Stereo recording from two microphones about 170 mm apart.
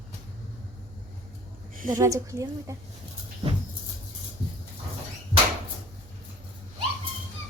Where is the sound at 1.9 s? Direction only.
20° right (ahead or behind).